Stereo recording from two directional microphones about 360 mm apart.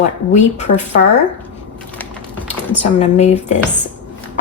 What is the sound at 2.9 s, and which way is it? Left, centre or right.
Speech, centre.